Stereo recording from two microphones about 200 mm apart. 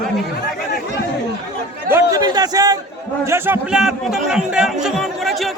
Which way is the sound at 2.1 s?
20° right (ahead or behind).